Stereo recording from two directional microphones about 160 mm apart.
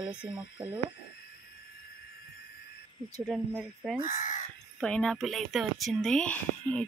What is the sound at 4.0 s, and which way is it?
Speech, 50° left (ahead or behind).